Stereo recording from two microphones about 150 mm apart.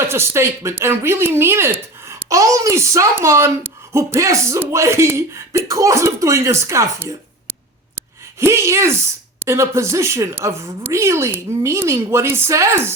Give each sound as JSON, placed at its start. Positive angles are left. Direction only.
{"t": 0.0, "sound": "speech", "side_deg": -15}
{"t": 7.9, "sound": "a sound", "side_deg": -15}
{"t": 9.4, "sound": "speech", "side_deg": -20}